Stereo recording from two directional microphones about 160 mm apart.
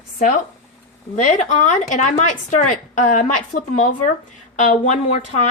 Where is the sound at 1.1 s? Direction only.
50° left (ahead or behind).